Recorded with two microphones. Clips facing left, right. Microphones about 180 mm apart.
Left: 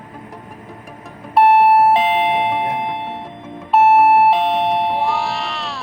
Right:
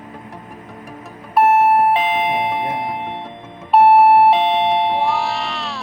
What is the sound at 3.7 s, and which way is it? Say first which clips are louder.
Doorbell: right 1 dB; centre (ahead or behind).